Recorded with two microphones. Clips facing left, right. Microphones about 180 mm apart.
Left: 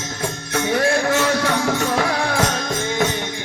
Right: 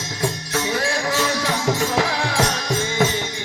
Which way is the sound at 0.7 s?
55° left (ahead or behind).